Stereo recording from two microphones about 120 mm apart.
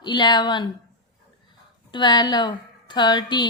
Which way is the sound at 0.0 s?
35° left (ahead or behind).